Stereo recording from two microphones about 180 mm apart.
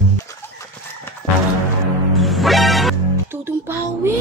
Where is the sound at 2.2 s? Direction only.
Centre (ahead or behind).